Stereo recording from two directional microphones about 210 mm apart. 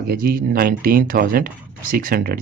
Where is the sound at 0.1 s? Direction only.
45° right (ahead or behind).